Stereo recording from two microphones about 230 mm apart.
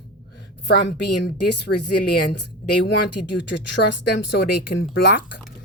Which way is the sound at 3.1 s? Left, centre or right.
Left.